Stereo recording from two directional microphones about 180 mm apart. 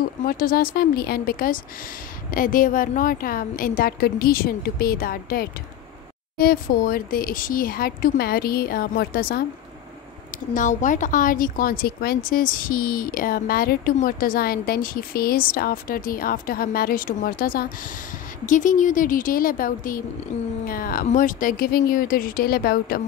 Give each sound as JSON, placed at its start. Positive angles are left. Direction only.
{"t": 0.2, "sound": "a woman's voice", "side_deg": 50}
{"t": 10.5, "sound": "a woman's voice", "side_deg": 45}